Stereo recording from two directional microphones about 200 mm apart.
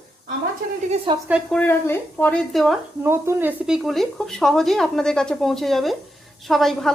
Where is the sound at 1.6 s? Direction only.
10° left (ahead or behind).